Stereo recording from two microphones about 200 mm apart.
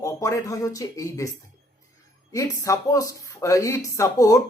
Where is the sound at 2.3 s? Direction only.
15° left (ahead or behind).